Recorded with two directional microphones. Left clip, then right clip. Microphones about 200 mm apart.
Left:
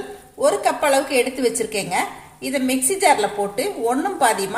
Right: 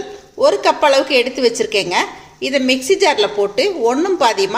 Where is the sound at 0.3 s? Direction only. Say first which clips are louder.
Right 5 dB; 35° right (ahead or behind).